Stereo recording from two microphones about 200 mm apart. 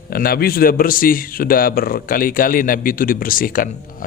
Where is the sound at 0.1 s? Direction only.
50° left (ahead or behind).